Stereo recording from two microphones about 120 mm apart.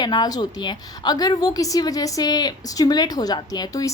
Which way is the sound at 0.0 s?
35° left (ahead or behind).